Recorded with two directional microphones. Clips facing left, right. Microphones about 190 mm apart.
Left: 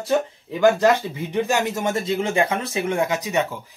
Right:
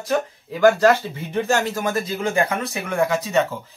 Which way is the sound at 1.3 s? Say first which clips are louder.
Right 1 dB; 15° left (ahead or behind).